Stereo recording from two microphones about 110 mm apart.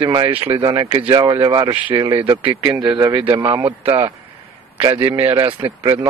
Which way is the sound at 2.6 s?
35° right (ahead or behind).